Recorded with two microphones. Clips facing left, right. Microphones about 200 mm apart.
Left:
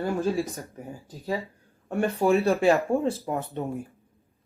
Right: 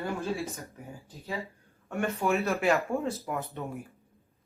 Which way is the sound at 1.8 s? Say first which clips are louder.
Left 6 dB; 35° left (ahead or behind).